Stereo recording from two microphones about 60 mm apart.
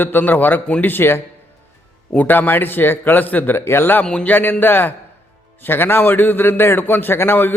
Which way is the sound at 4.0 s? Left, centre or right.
Centre.